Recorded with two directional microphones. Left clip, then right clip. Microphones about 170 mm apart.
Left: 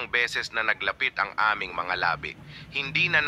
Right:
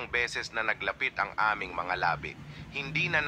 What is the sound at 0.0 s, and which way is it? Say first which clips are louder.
Speech: left 5 dB; 25° left (ahead or behind).